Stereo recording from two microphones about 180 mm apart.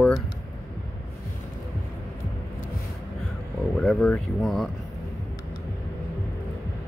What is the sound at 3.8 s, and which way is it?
Speech, 5° left (ahead or behind).